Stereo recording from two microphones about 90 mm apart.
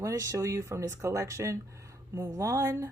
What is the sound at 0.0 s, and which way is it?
A woman's voice, 35° right (ahead or behind).